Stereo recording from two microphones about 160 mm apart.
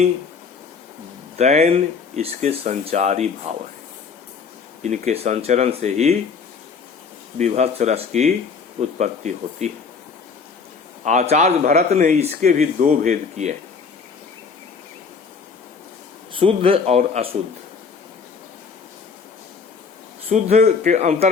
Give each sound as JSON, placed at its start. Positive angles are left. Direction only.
{"t": 1.4, "sound": "speech", "side_deg": -45}
{"t": 4.8, "sound": "speech", "side_deg": -45}
{"t": 7.3, "sound": "speech", "side_deg": -45}
{"t": 11.0, "sound": "speech", "side_deg": -50}
{"t": 16.3, "sound": "a man's voice", "side_deg": -35}
{"t": 20.3, "sound": "speech", "side_deg": -45}